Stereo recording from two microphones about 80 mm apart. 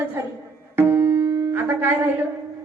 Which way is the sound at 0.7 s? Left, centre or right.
Right.